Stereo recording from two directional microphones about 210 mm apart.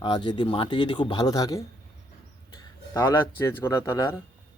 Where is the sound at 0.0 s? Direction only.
20° left (ahead or behind).